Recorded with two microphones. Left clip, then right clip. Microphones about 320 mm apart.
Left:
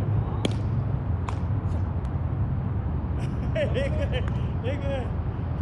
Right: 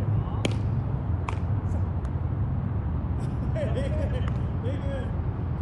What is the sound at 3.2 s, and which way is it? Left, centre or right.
Vehicle, centre.